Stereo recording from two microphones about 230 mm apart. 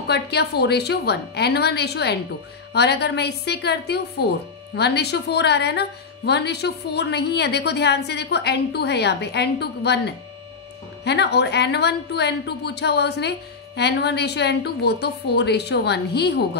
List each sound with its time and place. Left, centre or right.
0.0 s a woman's voice: left